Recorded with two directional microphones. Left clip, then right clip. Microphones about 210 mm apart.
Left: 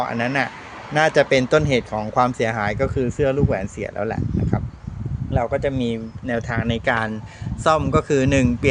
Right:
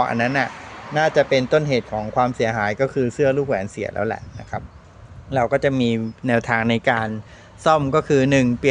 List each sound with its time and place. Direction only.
0.0 s speech: 15° right (ahead or behind)
0.9 s speech: 5° left (ahead or behind)
5.3 s speech: 20° right (ahead or behind)
6.9 s speech: centre (ahead or behind)